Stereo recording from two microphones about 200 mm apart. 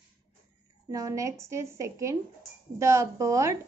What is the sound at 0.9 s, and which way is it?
Speech, 15° right (ahead or behind).